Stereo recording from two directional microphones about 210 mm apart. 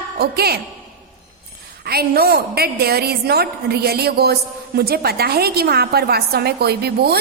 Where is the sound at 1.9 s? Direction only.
50° right (ahead or behind).